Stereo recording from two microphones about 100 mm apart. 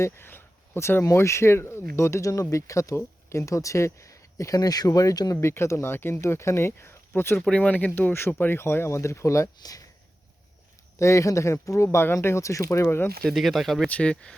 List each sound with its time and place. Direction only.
0.0 s speech: 20° left (ahead or behind); by 5.4 s 40° left (ahead or behind)
5.4 s speech: 25° left (ahead or behind)
11.0 s speech: 30° left (ahead or behind)
13.2 s speech: centre (ahead or behind)
13.8 s speech: 10° left (ahead or behind)